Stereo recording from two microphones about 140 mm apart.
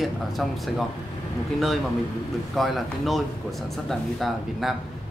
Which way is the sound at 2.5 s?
Centre (ahead or behind).